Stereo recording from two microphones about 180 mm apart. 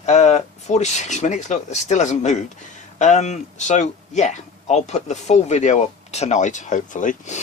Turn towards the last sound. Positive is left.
turn(degrees=45)  # may be behind; listen again after turning